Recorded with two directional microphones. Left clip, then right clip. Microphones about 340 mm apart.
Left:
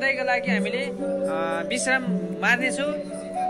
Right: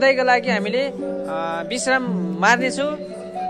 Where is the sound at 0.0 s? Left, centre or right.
Centre.